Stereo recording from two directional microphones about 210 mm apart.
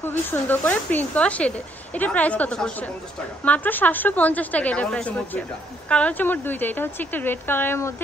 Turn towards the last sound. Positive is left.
turn(degrees=10)  # may be behind; listen again after turning